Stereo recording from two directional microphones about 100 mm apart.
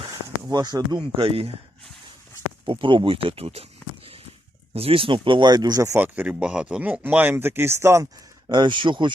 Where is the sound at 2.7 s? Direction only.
55° right (ahead or behind); by 3.6 s 75° right (ahead or behind).